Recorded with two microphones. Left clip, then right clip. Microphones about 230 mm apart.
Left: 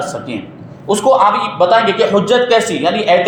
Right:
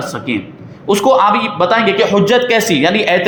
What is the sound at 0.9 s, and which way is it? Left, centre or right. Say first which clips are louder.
A man's voice: even; right.